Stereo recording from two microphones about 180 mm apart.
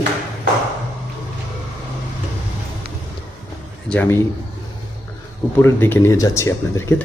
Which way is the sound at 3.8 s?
10° left (ahead or behind).